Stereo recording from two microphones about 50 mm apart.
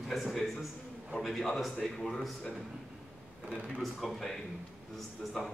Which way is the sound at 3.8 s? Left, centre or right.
Centre.